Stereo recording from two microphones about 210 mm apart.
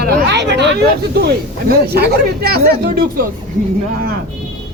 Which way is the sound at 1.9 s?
50° right (ahead or behind).